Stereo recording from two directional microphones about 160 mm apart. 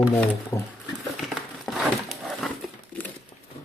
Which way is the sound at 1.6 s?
Centre (ahead or behind).